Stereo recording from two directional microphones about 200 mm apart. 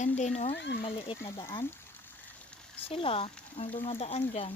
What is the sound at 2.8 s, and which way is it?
Speech, 25° left (ahead or behind).